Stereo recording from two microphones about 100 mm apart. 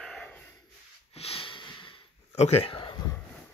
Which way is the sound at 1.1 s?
85° left.